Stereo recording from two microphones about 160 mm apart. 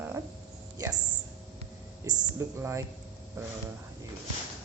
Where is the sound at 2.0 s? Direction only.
15° right (ahead or behind).